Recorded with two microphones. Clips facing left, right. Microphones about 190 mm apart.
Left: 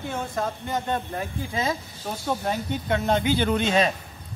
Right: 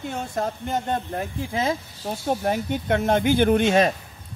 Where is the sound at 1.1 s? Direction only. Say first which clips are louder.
Right 2 dB; 55° right (ahead or behind).